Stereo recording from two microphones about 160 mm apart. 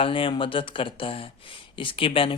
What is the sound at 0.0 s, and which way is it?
Speech, 35° left (ahead or behind).